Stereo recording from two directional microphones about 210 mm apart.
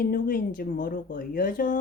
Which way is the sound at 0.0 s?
40° left (ahead or behind).